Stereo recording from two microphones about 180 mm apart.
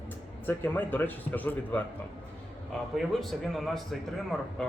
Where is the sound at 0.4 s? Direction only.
10° left (ahead or behind).